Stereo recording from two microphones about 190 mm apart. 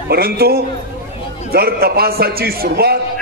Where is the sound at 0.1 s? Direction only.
55° right (ahead or behind).